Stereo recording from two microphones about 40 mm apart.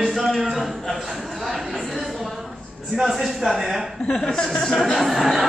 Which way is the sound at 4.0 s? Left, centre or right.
Left.